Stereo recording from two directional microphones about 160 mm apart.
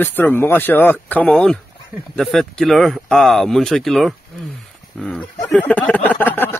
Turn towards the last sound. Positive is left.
turn(degrees=10)  # may be behind; listen again after turning